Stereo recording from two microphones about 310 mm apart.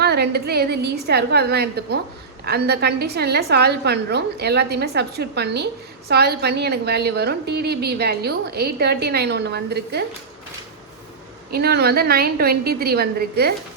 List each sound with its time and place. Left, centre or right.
0.0 s a woman's voice: right
11.5 s a woman's voice: right